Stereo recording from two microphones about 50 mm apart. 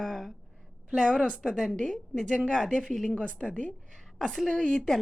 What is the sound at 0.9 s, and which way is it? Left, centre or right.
A woman's voice, centre.